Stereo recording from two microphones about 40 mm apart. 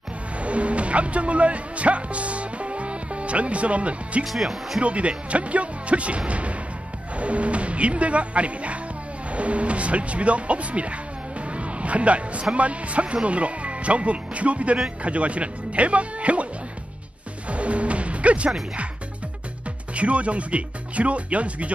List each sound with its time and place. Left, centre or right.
0.4 s music: right
4.3 s speech: centre
4.8 s speech: right
11.4 s a sound: right
12.5 s speech: right
17.5 s music: right
20.0 s speech: right